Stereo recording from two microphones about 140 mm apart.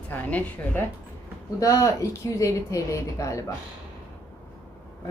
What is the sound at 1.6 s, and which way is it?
Speech, 20° left (ahead or behind).